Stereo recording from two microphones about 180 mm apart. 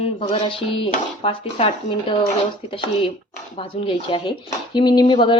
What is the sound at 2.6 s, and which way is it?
Speech, 30° left (ahead or behind).